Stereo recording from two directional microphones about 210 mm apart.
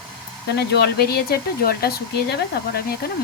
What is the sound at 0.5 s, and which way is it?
Speech, 50° left (ahead or behind).